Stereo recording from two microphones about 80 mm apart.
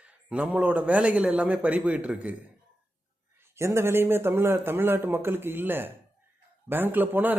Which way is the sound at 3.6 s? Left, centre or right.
Right.